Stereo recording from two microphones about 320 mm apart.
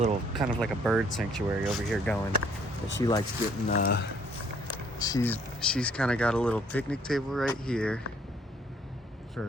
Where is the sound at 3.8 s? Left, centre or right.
Left.